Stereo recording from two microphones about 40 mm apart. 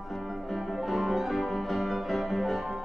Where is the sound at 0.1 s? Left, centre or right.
Centre.